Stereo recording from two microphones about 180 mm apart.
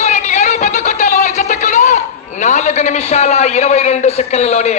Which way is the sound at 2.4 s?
40° left (ahead or behind).